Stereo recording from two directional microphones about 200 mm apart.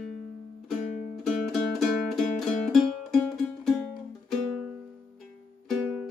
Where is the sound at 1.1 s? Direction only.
Centre (ahead or behind).